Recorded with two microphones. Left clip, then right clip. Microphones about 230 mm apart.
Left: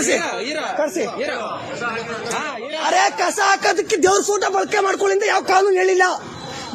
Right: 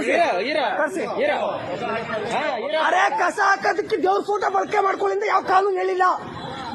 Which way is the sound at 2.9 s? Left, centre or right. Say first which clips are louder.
Left 5 dB; left.